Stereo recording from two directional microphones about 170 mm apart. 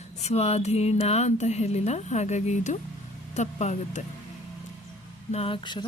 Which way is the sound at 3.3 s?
45° left (ahead or behind).